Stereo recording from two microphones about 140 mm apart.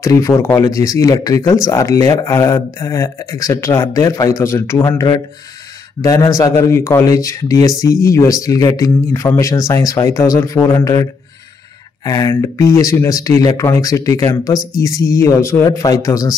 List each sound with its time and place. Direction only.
0.0 s speech: 20° left (ahead or behind)
12.0 s speech: 20° left (ahead or behind)